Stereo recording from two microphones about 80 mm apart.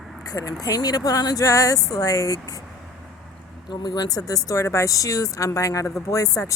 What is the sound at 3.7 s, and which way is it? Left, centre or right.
Speech, left.